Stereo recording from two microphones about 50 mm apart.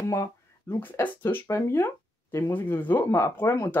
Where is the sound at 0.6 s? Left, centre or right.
Left.